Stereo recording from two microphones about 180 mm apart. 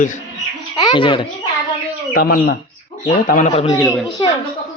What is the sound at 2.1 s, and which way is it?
Speech, 55° left (ahead or behind).